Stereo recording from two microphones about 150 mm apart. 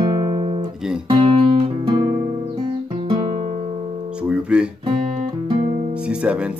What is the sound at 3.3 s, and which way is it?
Music, 45° right (ahead or behind).